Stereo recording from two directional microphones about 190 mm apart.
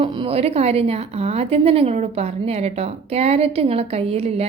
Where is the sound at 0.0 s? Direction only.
30° right (ahead or behind).